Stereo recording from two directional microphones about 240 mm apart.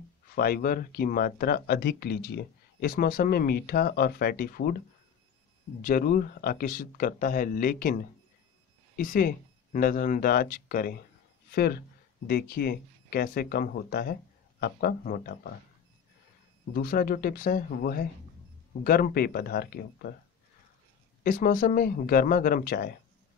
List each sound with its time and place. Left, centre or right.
0.4 s speech: left
16.7 s speech: left
21.2 s speech: left